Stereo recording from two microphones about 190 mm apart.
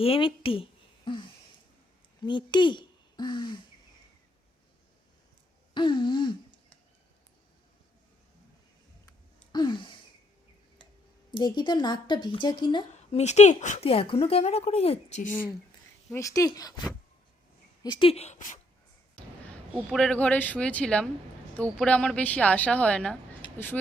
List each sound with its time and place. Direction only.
0.0 s speech: 30° left (ahead or behind)
2.2 s speech: 25° left (ahead or behind)
5.7 s a sound: 25° left (ahead or behind)
9.5 s a sound: 25° left (ahead or behind)
11.3 s speech: 25° left (ahead or behind)
12.9 s speech: 35° left (ahead or behind)
15.3 s a woman's voice: 10° left (ahead or behind)
17.8 s speech: 30° left (ahead or behind)
19.1 s a woman's voice: 5° left (ahead or behind)